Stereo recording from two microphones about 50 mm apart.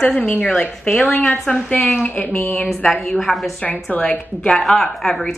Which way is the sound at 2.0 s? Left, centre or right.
Left.